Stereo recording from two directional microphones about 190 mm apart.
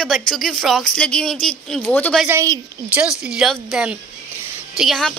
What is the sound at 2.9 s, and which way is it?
A woman's voice, 5° right (ahead or behind).